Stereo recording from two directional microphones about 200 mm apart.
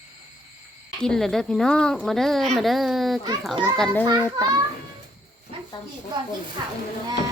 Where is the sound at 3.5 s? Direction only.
20° right (ahead or behind).